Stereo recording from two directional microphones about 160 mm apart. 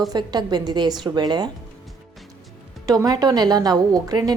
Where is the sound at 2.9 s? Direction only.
20° right (ahead or behind).